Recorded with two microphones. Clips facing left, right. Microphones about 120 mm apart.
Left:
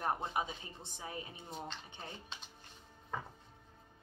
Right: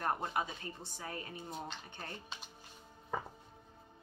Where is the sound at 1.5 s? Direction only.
5° right (ahead or behind).